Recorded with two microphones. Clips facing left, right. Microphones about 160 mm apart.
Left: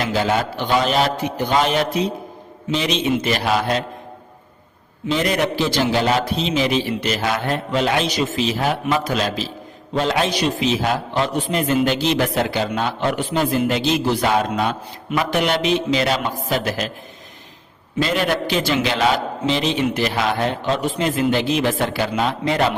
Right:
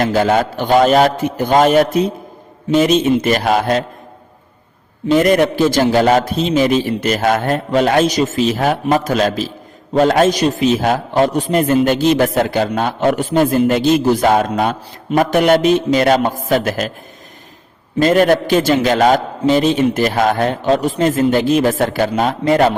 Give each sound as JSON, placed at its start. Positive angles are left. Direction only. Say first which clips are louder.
{"t": 0.0, "sound": "a man's voice", "louder": "right 6 dB", "side_deg": -50}
{"t": 5.1, "sound": "a man's voice", "louder": "right 8 dB", "side_deg": -50}
{"t": 18.0, "sound": "a man's voice", "louder": "right 8 dB", "side_deg": -45}